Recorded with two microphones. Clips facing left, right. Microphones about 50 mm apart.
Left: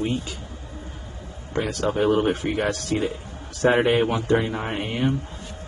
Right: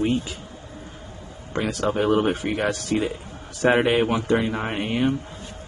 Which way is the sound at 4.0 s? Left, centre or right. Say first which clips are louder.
Even; right.